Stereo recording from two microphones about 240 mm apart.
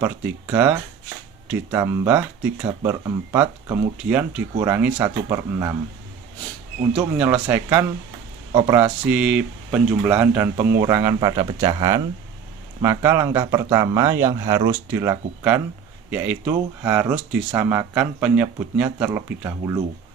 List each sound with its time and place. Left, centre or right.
0.0 s speech: centre
7.0 s speech: centre